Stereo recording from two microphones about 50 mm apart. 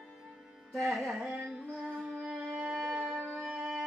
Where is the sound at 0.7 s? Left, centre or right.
Centre.